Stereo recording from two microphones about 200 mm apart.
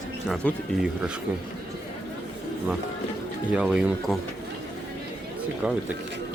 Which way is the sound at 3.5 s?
5° right (ahead or behind).